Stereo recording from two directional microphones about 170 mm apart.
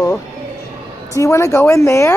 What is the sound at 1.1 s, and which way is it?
A child's voice, 20° left (ahead or behind).